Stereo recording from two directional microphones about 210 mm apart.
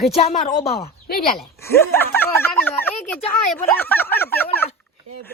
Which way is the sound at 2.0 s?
10° left (ahead or behind).